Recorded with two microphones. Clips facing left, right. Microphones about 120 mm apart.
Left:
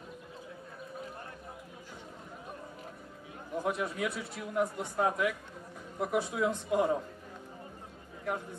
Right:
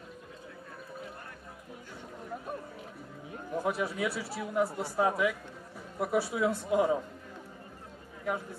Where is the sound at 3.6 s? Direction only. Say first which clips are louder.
Right 1 dB; 5° right (ahead or behind).